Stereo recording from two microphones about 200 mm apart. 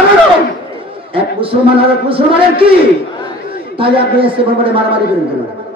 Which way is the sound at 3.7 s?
25° right (ahead or behind).